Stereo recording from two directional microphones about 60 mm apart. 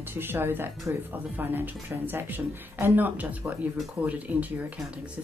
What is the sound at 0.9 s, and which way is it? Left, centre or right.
Speech, right.